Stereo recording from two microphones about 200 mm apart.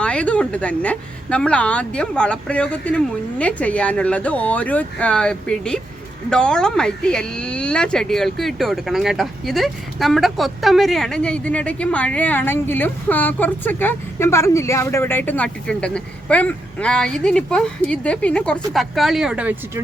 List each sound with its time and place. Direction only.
0.0 s speech: 5° left (ahead or behind)